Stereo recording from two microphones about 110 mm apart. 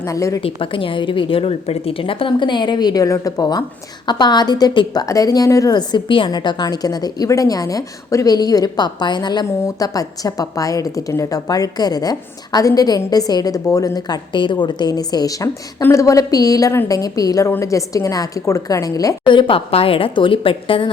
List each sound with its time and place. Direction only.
0.0 s a woman's voice: 30° left (ahead or behind)
0.4 s a woman's voice: 55° left (ahead or behind)
9.6 s a woman's voice: 30° left (ahead or behind)
19.3 s a woman's voice: 50° left (ahead or behind)